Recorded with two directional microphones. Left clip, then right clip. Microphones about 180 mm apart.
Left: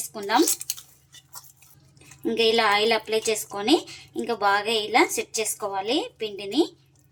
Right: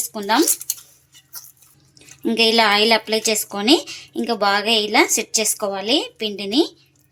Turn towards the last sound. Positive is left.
turn(degrees=-45)  # may be behind; listen again after turning